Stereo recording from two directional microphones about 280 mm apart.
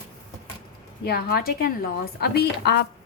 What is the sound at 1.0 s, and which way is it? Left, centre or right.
A woman's voice, left.